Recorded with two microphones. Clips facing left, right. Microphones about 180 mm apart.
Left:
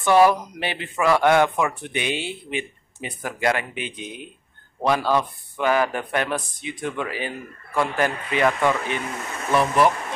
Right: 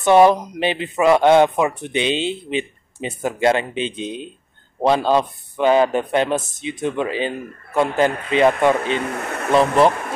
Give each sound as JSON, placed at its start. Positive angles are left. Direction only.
{"t": 0.0, "sound": "speech", "side_deg": -20}
{"t": 9.0, "sound": "speech", "side_deg": -65}